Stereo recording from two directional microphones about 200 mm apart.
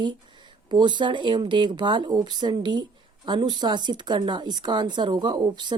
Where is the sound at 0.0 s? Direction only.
25° right (ahead or behind).